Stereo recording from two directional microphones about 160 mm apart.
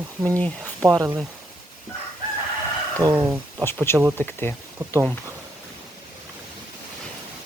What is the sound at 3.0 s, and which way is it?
Speech, 25° right (ahead or behind).